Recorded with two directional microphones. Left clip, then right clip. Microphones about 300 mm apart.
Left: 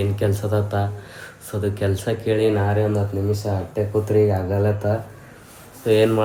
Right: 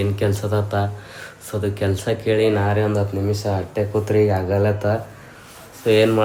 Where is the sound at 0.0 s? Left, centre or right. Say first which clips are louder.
Right 1 dB; centre.